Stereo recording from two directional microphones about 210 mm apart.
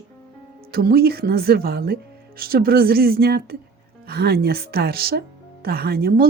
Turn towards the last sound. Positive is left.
turn(degrees=-45)  # may be behind; listen again after turning